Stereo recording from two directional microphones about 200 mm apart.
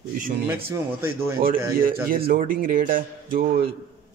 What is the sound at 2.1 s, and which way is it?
A man's voice, 45° right (ahead or behind).